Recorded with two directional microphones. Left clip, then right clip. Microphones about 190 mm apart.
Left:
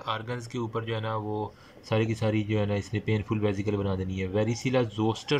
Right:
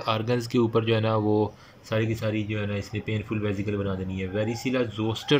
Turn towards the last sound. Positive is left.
turn(degrees=20)  # may be behind; listen again after turning